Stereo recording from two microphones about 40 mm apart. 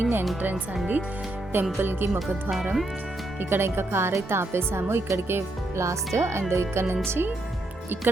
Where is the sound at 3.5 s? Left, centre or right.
Right.